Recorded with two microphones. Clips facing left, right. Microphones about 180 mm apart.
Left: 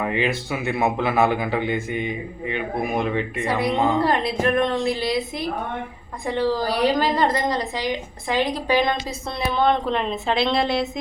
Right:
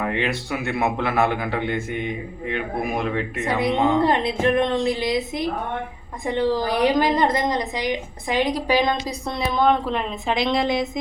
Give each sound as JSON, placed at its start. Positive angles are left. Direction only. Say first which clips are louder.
{"t": 0.0, "sound": "a man's voice", "louder": "left 1 dB", "side_deg": 0}
{"t": 4.0, "sound": "a woman's voice", "louder": "right 1 dB", "side_deg": -20}